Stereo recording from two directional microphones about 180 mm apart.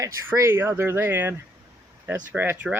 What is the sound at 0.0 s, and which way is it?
Speech, 15° right (ahead or behind).